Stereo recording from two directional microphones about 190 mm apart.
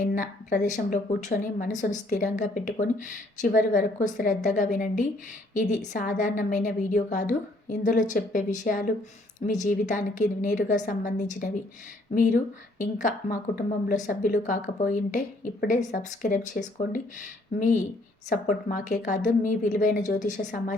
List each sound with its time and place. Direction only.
0.0 s a woman's voice: 45° left (ahead or behind)